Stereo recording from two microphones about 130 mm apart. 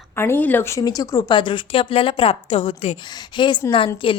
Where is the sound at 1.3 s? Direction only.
40° left (ahead or behind).